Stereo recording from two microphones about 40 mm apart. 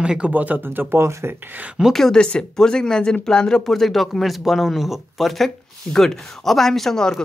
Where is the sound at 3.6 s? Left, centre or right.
Centre.